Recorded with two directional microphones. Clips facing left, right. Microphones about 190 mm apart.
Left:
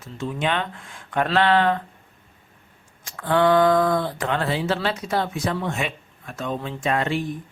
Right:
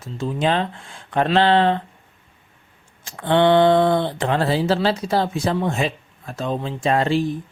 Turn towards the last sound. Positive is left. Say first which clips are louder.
# right 5 dB
turn(degrees=-30)  # may be behind; listen again after turning